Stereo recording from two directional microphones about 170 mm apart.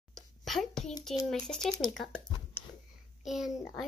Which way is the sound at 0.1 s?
Centre (ahead or behind).